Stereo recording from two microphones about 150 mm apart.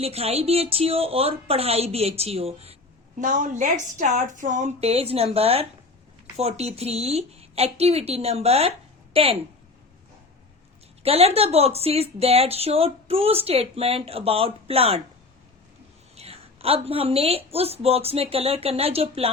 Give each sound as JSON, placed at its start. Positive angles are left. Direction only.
{"t": 0.0, "sound": "speech", "side_deg": -40}
{"t": 3.2, "sound": "a woman's voice", "side_deg": -60}
{"t": 11.0, "sound": "speech", "side_deg": -40}
{"t": 16.1, "sound": "speech", "side_deg": -40}